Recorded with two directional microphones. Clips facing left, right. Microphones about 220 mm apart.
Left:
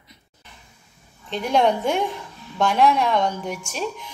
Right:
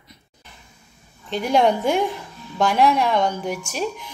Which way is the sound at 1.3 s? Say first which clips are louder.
Right 1 dB; 5° right (ahead or behind).